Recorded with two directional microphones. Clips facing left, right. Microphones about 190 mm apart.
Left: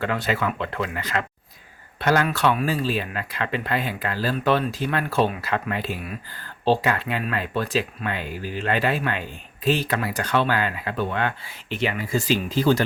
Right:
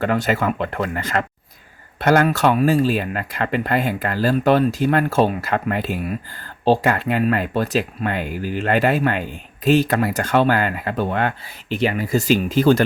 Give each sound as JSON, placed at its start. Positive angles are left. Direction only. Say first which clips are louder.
{"t": 0.0, "sound": "speech", "louder": "right 5 dB", "side_deg": -45}